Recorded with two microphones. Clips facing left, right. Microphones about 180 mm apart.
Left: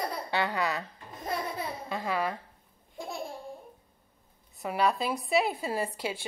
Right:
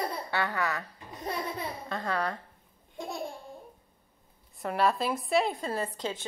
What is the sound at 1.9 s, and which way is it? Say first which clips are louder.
Speech: left 1 dB; 5° left (ahead or behind).